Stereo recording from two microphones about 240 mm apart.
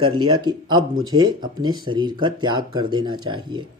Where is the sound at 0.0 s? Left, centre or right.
Centre.